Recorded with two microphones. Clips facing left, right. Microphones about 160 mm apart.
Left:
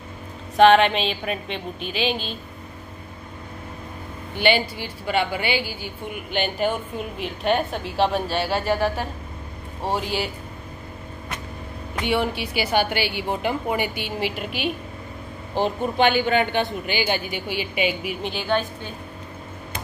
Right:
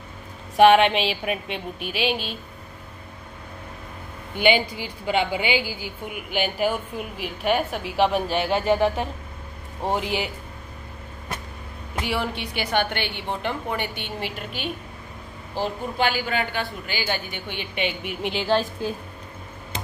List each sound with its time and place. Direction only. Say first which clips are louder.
0.6 s a woman's voice: even; 10° right (ahead or behind)
4.4 s a woman's voice: right 1 dB; 15° right (ahead or behind)
12.0 s a woman's voice: left 4 dB; centre (ahead or behind)
15.5 s a man's voice: left 5 dB; 20° left (ahead or behind); by 18.1 s 5° left (ahead or behind)
18.2 s speech: right 2 dB; 25° right (ahead or behind)